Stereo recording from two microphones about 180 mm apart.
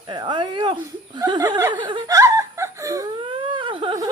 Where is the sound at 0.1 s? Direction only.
25° right (ahead or behind).